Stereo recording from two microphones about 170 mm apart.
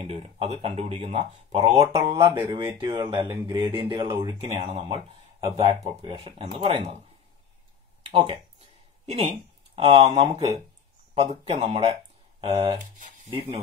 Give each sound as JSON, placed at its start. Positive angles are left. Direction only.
{"t": 0.0, "sound": "speech", "side_deg": -35}
{"t": 2.1, "sound": "speech", "side_deg": -20}
{"t": 8.1, "sound": "a sound", "side_deg": -30}
{"t": 9.8, "sound": "speech", "side_deg": -35}